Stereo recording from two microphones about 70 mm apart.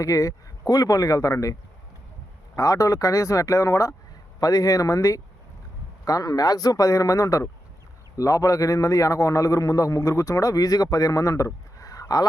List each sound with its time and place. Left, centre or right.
0.0 s a man's voice: left
2.6 s a man's voice: left
4.4 s a man's voice: left